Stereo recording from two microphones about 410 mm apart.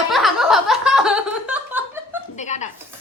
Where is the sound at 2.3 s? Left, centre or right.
Centre.